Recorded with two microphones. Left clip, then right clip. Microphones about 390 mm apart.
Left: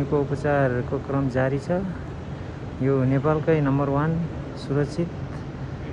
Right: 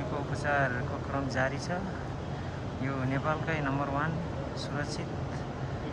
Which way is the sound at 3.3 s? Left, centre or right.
Centre.